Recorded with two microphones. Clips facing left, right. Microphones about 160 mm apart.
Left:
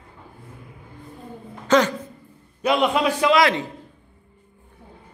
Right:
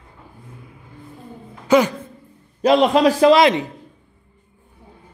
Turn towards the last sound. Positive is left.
turn(degrees=-20)  # may be behind; listen again after turning